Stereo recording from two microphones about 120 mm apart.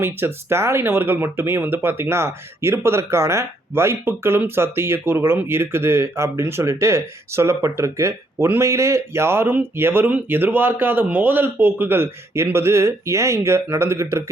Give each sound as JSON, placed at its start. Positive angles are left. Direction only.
{"t": 0.0, "sound": "speech", "side_deg": -20}